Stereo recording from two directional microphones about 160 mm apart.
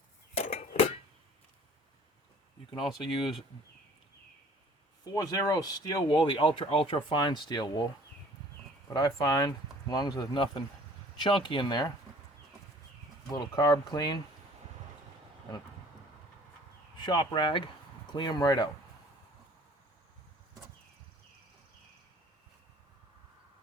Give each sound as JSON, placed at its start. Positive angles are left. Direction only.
{"t": 0.3, "sound": "cutlery", "side_deg": 45}
{"t": 3.2, "sound": "speech", "side_deg": 0}
{"t": 5.1, "sound": "speech", "side_deg": 25}
{"t": 8.9, "sound": "speech", "side_deg": 25}
{"t": 13.3, "sound": "speech", "side_deg": 25}
{"t": 17.1, "sound": "speech", "side_deg": 30}